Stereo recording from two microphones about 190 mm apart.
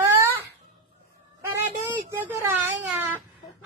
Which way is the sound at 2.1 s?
10° right (ahead or behind).